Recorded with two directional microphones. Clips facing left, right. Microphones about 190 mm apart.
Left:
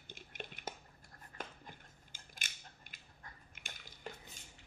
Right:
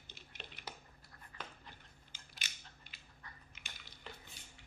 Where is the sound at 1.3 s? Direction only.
50° left (ahead or behind).